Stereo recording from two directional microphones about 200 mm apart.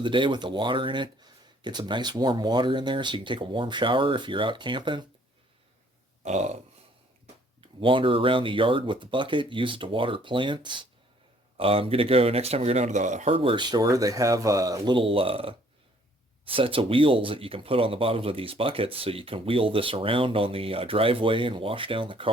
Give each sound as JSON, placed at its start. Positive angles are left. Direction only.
{"t": 0.0, "sound": "speech", "side_deg": -25}
{"t": 6.2, "sound": "a sound", "side_deg": -35}
{"t": 7.6, "sound": "speech", "side_deg": -25}